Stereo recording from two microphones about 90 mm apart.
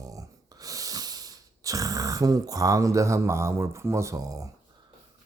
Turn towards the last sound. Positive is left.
turn(degrees=-40)  # may be behind; listen again after turning